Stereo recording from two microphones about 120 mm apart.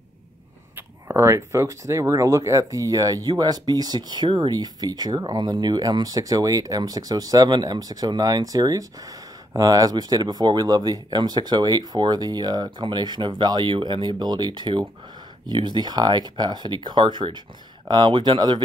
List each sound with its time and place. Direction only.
0.7 s speech: 20° right (ahead or behind); by 18.6 s 40° right (ahead or behind)